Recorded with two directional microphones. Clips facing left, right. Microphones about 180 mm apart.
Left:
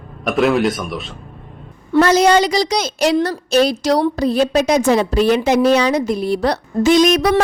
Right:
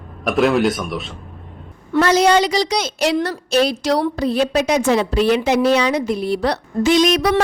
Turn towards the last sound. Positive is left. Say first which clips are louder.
# left 2 dB
turn(degrees=50)  # may be behind; listen again after turning